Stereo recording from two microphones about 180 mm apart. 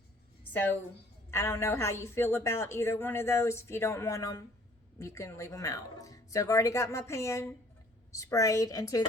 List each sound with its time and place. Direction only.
1.3 s a woman's voice: 15° left (ahead or behind)